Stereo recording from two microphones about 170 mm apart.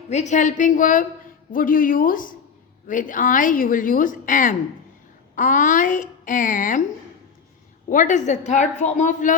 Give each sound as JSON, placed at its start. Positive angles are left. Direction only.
{"t": 0.1, "sound": "a woman's voice", "side_deg": 45}
{"t": 7.9, "sound": "a woman's voice", "side_deg": 50}